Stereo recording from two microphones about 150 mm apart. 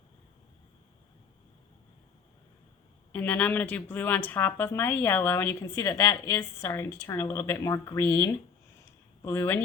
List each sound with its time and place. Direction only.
3.1 s a woman's voice: 10° left (ahead or behind)